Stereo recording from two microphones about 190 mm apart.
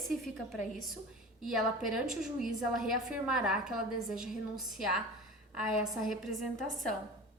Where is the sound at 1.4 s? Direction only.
Centre (ahead or behind).